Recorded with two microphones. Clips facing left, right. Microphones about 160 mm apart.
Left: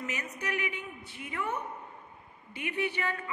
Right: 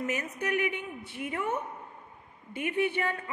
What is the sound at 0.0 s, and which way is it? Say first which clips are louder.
A man's voice: right 5 dB; 50° right (ahead or behind).